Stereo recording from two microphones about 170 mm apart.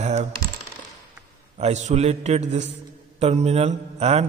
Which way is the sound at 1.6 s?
40° right (ahead or behind).